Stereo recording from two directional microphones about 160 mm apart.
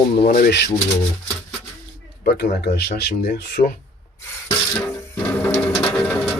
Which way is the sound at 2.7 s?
85° left.